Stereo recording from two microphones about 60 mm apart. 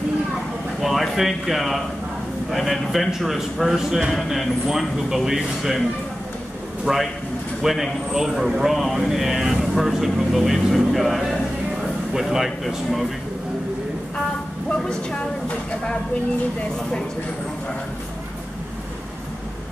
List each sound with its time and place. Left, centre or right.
0.7 s a man's voice: centre
6.9 s a man's voice: centre
14.8 s speech: centre